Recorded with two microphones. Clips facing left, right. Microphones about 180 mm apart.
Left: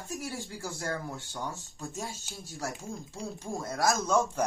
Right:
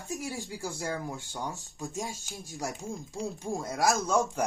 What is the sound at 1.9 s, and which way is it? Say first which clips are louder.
Speech: right 3 dB; 15° right (ahead or behind).